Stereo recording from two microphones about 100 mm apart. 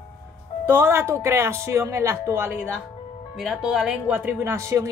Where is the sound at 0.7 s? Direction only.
20° right (ahead or behind).